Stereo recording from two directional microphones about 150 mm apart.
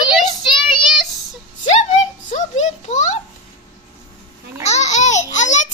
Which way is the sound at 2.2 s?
55° left (ahead or behind).